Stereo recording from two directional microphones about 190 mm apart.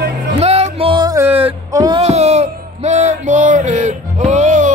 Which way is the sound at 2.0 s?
35° right (ahead or behind).